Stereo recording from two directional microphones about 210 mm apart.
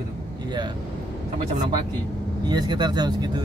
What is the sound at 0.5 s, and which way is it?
Speech, 20° right (ahead or behind).